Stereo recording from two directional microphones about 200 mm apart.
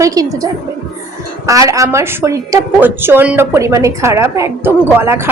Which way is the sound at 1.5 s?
15° right (ahead or behind).